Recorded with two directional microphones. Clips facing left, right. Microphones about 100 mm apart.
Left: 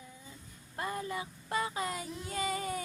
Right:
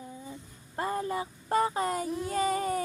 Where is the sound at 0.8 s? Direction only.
35° right (ahead or behind).